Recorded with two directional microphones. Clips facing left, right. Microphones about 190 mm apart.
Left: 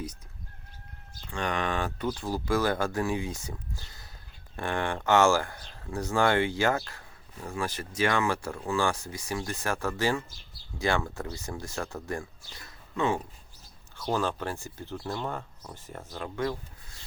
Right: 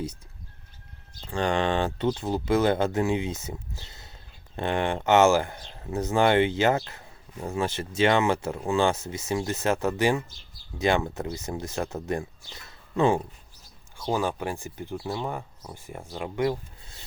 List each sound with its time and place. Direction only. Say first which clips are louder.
1.2 s speech: right 6 dB; 30° right (ahead or behind)
14.1 s speech: right 2 dB; 10° right (ahead or behind)